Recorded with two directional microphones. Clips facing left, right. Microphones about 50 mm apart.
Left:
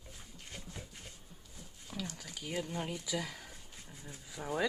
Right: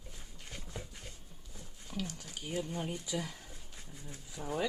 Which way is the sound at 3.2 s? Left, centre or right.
Left.